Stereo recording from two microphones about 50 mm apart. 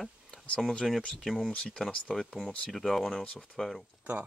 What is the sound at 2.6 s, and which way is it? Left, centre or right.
Speech, centre.